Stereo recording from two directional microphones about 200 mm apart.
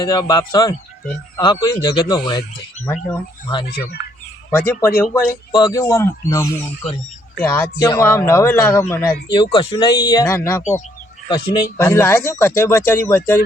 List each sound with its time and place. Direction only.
0.0 s speech: 25° left (ahead or behind)
4.5 s speech: 10° left (ahead or behind)
9.3 s speech: 25° left (ahead or behind)
10.6 s speech: 35° left (ahead or behind)
11.8 s speech: 10° left (ahead or behind)